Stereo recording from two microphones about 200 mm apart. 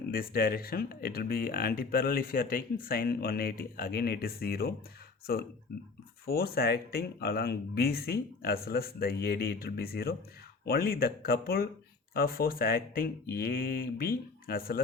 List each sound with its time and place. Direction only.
0.1 s speech: 45° left (ahead or behind)